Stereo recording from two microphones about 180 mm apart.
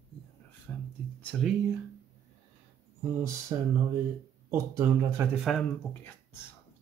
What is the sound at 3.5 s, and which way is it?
Speech, 20° right (ahead or behind).